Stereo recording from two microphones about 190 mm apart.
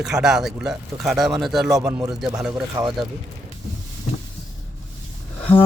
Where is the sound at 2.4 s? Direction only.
5° right (ahead or behind).